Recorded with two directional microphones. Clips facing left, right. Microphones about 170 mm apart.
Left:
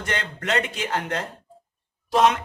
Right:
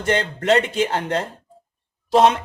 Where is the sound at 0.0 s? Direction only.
30° right (ahead or behind).